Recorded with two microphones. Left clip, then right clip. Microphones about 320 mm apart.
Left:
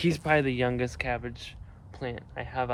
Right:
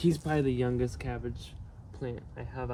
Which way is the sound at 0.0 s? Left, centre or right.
Centre.